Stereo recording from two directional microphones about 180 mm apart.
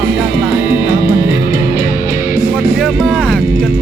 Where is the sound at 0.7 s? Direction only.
60° left (ahead or behind).